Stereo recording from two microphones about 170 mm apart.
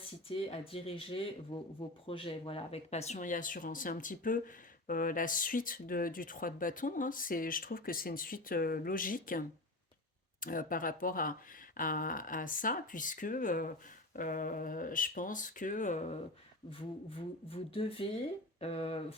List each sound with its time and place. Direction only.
0.0 s speech: 35° left (ahead or behind); by 9.4 s 55° left (ahead or behind)
10.4 s speech: 55° left (ahead or behind)
16.7 s speech: 35° left (ahead or behind)